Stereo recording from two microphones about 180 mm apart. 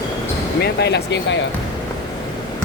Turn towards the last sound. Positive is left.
turn(degrees=75)  # may be behind; listen again after turning